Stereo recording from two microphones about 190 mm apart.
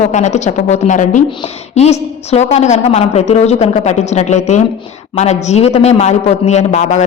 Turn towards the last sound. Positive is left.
turn(degrees=35)  # may be behind; listen again after turning